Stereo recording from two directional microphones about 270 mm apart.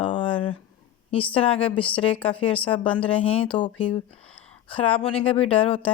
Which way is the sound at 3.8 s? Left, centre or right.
Centre.